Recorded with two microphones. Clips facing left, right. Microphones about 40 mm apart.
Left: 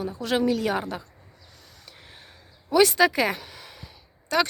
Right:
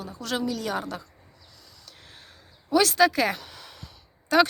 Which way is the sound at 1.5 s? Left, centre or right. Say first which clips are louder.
Left 2 dB; left.